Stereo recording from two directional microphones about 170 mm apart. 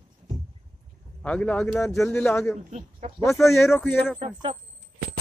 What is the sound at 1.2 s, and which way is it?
Speech, 5° left (ahead or behind).